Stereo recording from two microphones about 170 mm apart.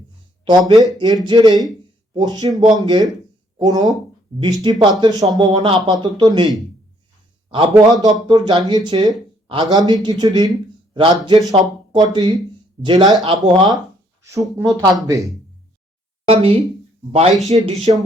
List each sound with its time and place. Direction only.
0.4 s speech: 25° right (ahead or behind)
8.3 s speech: 25° right (ahead or behind)
16.2 s speech: 35° right (ahead or behind)
17.3 s speech: centre (ahead or behind)
17.9 s speech: 35° right (ahead or behind)